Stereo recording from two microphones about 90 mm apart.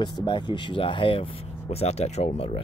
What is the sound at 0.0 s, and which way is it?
Speech, 60° left (ahead or behind).